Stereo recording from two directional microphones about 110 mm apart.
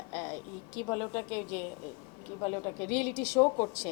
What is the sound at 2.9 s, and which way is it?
Speech, 10° left (ahead or behind).